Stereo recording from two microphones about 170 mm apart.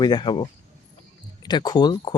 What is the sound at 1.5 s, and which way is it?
Speech, 25° left (ahead or behind).